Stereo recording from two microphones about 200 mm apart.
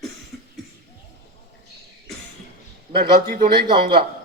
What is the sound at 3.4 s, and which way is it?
Speech, 20° right (ahead or behind).